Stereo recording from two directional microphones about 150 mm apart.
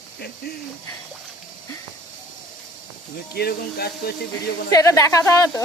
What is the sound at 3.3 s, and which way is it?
Speech, 90° left.